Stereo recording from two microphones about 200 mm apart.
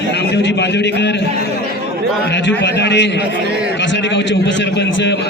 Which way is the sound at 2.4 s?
60° left (ahead or behind).